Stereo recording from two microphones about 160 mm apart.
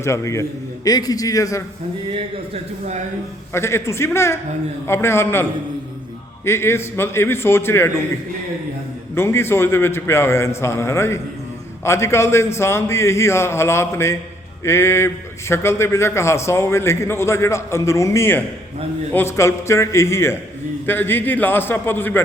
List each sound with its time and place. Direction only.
0.0 s a man's voice: 20° left (ahead or behind)
2.5 s speech: 45° right (ahead or behind)
3.5 s a man's voice: 15° left (ahead or behind)
9.1 s a man's voice: 15° left (ahead or behind)